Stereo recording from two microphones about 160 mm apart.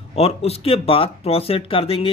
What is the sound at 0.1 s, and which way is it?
Speech, 40° left (ahead or behind).